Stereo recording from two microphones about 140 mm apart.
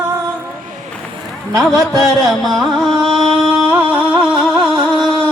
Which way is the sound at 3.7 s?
15° right (ahead or behind).